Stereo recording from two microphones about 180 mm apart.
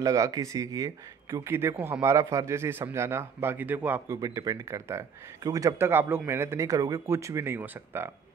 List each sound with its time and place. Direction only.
0.0 s speech: 20° right (ahead or behind)